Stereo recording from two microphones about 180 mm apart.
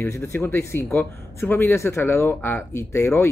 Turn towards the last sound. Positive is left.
turn(degrees=15)  # may be behind; listen again after turning